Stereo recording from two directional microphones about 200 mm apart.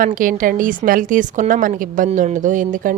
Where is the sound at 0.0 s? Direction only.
40° right (ahead or behind).